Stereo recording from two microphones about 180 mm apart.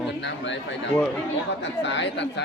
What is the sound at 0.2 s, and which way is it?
Speech, 80° left.